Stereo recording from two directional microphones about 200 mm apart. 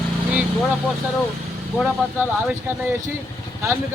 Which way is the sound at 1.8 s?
5° right (ahead or behind).